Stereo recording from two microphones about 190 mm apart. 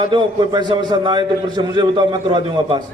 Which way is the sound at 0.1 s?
25° right (ahead or behind).